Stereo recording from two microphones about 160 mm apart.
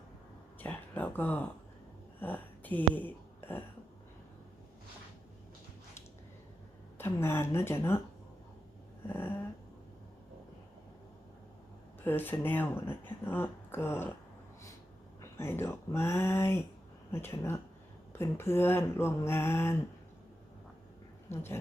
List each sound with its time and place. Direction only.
0.6 s speech: 10° left (ahead or behind)
7.0 s speech: 15° left (ahead or behind)
9.0 s a sound: 15° left (ahead or behind)
12.0 s speech: 10° left (ahead or behind)
15.2 s speech: 15° left (ahead or behind)
21.2 s speech: 15° left (ahead or behind)